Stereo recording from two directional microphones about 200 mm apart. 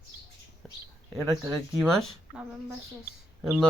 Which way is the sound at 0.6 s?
5° left (ahead or behind).